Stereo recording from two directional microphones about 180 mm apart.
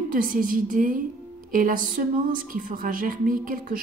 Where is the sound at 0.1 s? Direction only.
50° right (ahead or behind).